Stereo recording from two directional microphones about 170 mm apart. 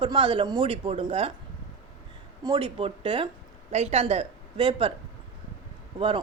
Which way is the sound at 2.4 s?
25° right (ahead or behind).